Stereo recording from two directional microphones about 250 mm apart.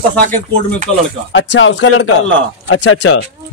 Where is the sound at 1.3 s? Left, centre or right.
Left.